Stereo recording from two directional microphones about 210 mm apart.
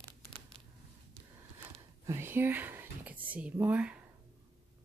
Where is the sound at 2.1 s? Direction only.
10° right (ahead or behind).